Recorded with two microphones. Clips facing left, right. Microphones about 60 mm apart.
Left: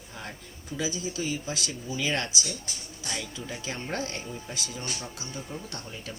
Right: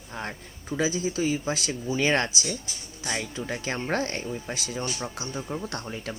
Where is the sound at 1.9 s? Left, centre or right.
Right.